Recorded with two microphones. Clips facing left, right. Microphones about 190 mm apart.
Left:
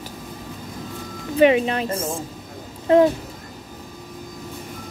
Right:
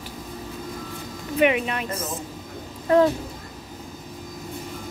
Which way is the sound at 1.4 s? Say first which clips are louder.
Left 5 dB; 30° left (ahead or behind).